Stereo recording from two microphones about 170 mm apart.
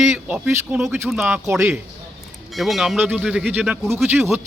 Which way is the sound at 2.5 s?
Centre (ahead or behind).